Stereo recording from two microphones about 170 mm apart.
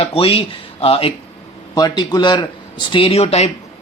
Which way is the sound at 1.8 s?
25° left (ahead or behind).